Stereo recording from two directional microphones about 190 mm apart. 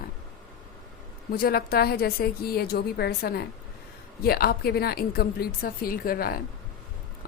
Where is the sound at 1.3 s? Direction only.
50° left (ahead or behind).